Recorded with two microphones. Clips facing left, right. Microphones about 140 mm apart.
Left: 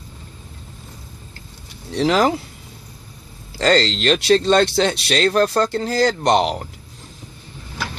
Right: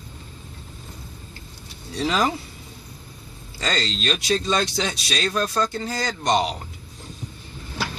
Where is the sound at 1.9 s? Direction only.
65° left (ahead or behind).